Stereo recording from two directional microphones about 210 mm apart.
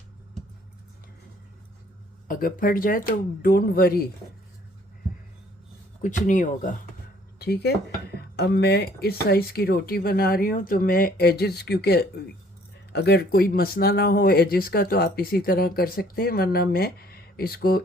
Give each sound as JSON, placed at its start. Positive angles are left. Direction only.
{"t": 2.2, "sound": "speech", "side_deg": 40}
{"t": 6.0, "sound": "speech", "side_deg": 35}
{"t": 7.3, "sound": "speech", "side_deg": 50}